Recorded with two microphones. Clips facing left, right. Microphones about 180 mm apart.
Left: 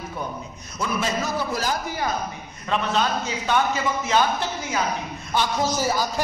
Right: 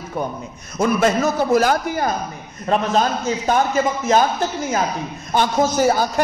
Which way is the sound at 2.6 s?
40° right (ahead or behind).